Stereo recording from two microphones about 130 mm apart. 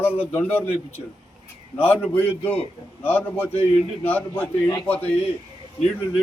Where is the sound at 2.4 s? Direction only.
45° left (ahead or behind).